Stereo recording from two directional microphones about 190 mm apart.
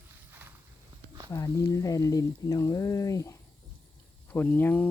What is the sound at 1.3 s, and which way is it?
Speech, 15° left (ahead or behind).